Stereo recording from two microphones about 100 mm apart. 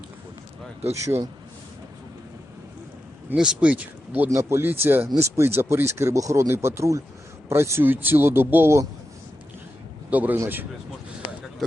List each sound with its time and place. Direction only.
0.9 s a man's voice: 30° right (ahead or behind)
3.3 s speech: 10° right (ahead or behind)
4.3 s speech: 25° right (ahead or behind)
10.1 s speech: 15° right (ahead or behind)